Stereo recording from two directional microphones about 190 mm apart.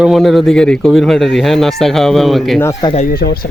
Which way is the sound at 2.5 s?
15° left (ahead or behind).